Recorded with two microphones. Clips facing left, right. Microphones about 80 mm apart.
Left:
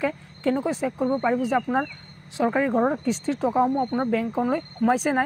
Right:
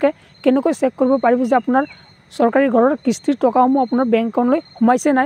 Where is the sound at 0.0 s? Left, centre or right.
Right.